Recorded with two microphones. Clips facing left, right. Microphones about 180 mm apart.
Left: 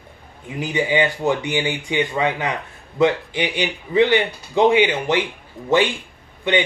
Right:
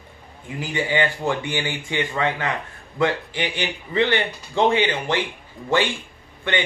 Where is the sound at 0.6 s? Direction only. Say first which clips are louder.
Left 3 dB; 20° left (ahead or behind).